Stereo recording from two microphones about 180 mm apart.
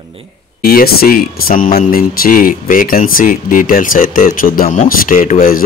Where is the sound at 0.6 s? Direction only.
55° left (ahead or behind).